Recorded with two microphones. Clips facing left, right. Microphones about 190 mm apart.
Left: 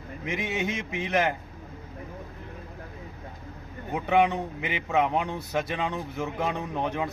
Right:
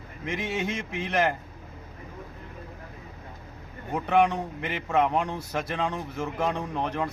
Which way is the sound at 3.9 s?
Centre (ahead or behind).